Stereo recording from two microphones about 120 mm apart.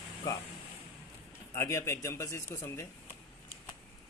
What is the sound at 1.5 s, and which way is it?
Speech, 25° left (ahead or behind).